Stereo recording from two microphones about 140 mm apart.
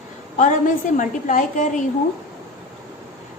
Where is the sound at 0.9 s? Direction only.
65° left (ahead or behind).